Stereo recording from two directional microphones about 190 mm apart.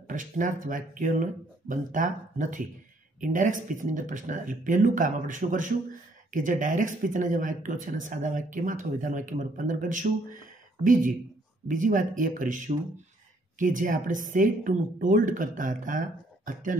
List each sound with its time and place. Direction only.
0.0 s speech: 45° right (ahead or behind)